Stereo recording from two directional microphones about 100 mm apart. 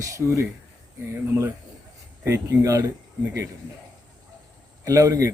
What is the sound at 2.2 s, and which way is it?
Speech, 30° right (ahead or behind).